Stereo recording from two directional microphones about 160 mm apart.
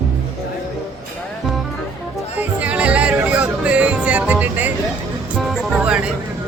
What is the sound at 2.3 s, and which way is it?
Music, 10° right (ahead or behind).